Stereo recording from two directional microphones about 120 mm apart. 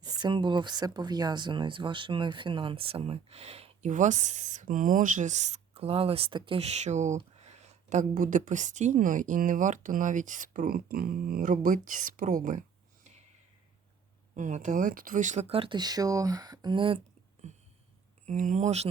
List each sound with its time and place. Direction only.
0.0 s speech: 35° right (ahead or behind)
6.6 s speech: 65° right (ahead or behind)
7.3 s a woman's voice: 65° right (ahead or behind); by 12.6 s 90° right
14.3 s a woman's voice: 90° right; by 15.8 s 50° right (ahead or behind)
15.8 s speech: 30° right (ahead or behind)
18.3 s speech: 85° right; by 18.9 s 70° right (ahead or behind)